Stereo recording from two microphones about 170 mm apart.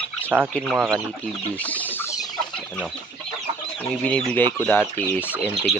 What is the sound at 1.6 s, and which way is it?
Chicken, 10° left (ahead or behind).